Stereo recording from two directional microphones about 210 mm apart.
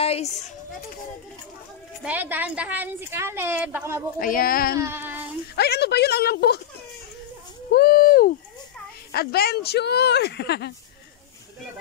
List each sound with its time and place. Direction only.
0.0 s speech: 30° left (ahead or behind)
2.0 s a woman's voice: 10° right (ahead or behind)
4.2 s speech: 45° left (ahead or behind)
4.7 s a woman's voice: 10° right (ahead or behind)
5.6 s speech: 50° left (ahead or behind)
7.7 s speech: 45° left (ahead or behind)